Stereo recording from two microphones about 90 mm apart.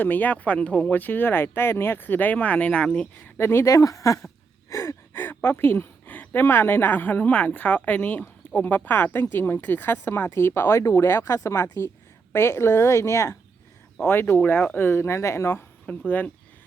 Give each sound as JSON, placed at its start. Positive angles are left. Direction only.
{"t": 0.0, "sound": "speech", "side_deg": 20}
{"t": 3.3, "sound": "speech", "side_deg": 25}
{"t": 12.3, "sound": "speech", "side_deg": 30}
{"t": 14.1, "sound": "speech", "side_deg": 20}
{"t": 15.9, "sound": "speech", "side_deg": 20}